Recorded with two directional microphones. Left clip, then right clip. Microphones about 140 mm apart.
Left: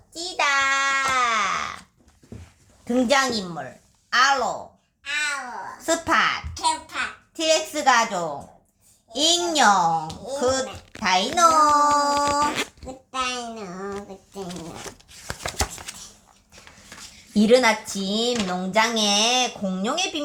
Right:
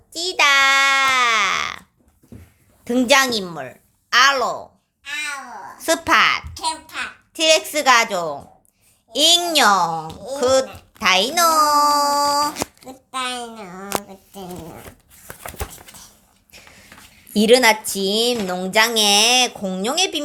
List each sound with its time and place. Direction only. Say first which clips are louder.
0.1 s a sound: right 6 dB; 70° right (ahead or behind)
2.8 s a woman's voice: right 5 dB; 60° right (ahead or behind)
4.1 s a sound: right 4 dB; 55° right (ahead or behind)
5.0 s babbling: left 1 dB; 10° left (ahead or behind)
5.8 s speech: right 5 dB; 50° right (ahead or behind)
6.6 s a sound: left 1 dB; centre (ahead or behind)
7.3 s a child's voice: right 6 dB; 50° right (ahead or behind)
13.1 s a woman's voice: right 1 dB; 65° right (ahead or behind)
17.3 s speech: right 4 dB; 45° right (ahead or behind)